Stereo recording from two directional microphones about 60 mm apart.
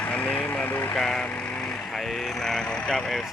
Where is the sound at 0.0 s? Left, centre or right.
Left.